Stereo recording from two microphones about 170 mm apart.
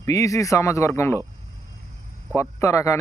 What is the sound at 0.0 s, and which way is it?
Speech, 20° left (ahead or behind).